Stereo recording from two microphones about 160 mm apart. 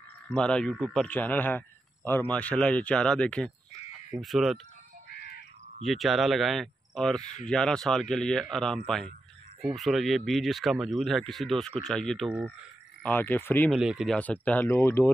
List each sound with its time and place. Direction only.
0.3 s speech: 5° left (ahead or behind)
5.1 s crow: 85° left
5.8 s speech: centre (ahead or behind)
13.7 s speech: 5° right (ahead or behind)
14.1 s speech: 10° left (ahead or behind)